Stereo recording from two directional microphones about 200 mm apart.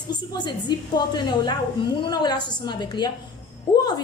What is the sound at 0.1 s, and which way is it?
A woman's voice, 20° left (ahead or behind).